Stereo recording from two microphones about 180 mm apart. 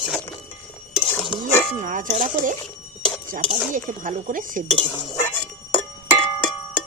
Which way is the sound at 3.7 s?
45° right (ahead or behind).